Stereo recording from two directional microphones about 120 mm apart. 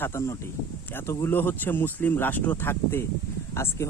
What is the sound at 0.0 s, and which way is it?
Speech, 25° left (ahead or behind).